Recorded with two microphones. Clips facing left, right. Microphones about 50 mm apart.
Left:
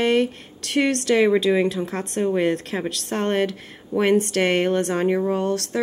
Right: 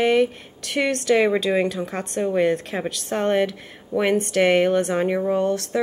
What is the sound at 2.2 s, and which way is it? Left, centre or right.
Speech, centre.